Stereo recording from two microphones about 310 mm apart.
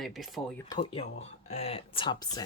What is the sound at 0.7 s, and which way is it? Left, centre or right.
Speech, centre.